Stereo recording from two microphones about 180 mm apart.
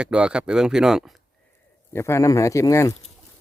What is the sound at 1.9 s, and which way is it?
Speech, 15° left (ahead or behind).